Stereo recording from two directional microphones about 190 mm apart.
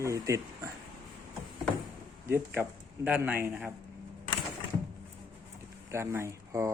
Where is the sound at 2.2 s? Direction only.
10° right (ahead or behind).